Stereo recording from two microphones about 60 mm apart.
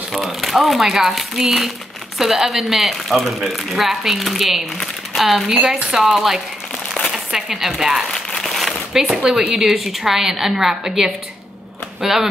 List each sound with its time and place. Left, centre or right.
0.1 s a woman's voice: centre
8.4 s a sound: centre
9.0 s a woman's voice: centre